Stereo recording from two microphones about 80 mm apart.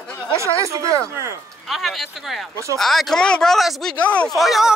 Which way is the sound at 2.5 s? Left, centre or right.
Right.